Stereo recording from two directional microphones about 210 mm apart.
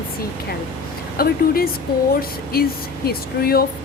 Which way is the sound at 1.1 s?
45° left (ahead or behind).